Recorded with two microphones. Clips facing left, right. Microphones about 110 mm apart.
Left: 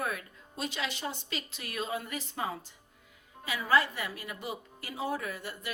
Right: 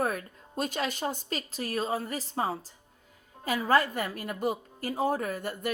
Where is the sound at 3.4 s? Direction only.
45° right (ahead or behind).